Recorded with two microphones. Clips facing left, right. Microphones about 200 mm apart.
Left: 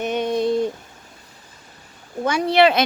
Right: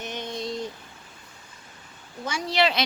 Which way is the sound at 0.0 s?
60° left (ahead or behind).